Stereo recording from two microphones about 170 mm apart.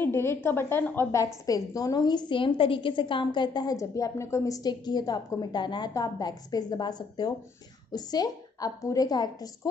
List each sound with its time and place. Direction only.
0.0 s a woman's voice: 15° left (ahead or behind)